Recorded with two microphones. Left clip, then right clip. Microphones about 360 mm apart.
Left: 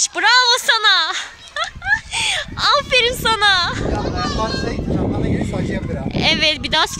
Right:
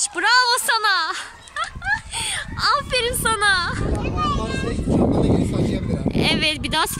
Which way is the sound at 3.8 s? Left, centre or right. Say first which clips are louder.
Left 2 dB; left.